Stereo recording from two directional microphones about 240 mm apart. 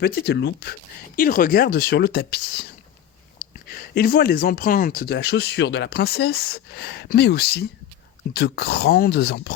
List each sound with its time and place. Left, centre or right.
0.0 s speech: left